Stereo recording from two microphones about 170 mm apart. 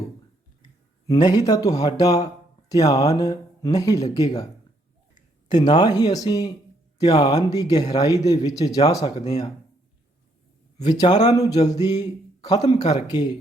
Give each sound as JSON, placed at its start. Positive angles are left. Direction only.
{"t": 1.0, "sound": "speech", "side_deg": 20}
{"t": 5.5, "sound": "speech", "side_deg": 25}
{"t": 10.8, "sound": "speech", "side_deg": 25}
{"t": 12.0, "sound": "a sound", "side_deg": 20}